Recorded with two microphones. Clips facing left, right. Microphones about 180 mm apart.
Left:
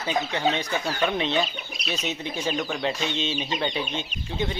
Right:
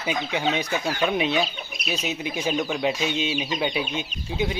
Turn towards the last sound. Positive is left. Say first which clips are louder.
# right 2 dB
turn(degrees=-10)  # may be behind; listen again after turning